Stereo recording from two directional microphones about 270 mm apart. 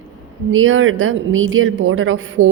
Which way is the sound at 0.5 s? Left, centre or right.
Right.